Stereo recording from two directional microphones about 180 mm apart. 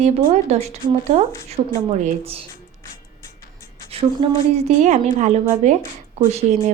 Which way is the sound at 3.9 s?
35° right (ahead or behind).